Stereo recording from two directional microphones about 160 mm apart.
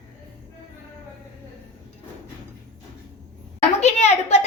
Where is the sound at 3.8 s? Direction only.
45° left (ahead or behind).